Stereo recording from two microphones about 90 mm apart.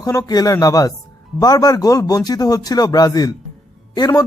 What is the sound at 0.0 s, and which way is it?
Speech, 45° left (ahead or behind).